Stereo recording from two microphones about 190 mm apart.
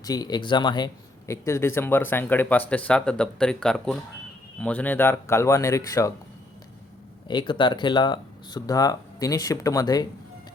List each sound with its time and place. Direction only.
0.0 s speech: 20° left (ahead or behind)
7.3 s speech: 25° left (ahead or behind)